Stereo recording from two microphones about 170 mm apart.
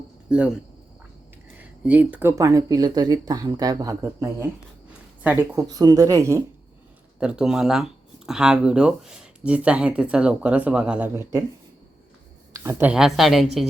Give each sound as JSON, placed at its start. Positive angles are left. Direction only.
{"t": 0.3, "sound": "speech", "side_deg": -5}
{"t": 7.2, "sound": "a woman's voice", "side_deg": -5}
{"t": 12.6, "sound": "a woman's voice", "side_deg": -5}